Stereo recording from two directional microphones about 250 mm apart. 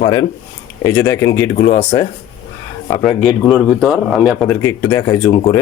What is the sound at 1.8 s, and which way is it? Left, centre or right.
Speech, left.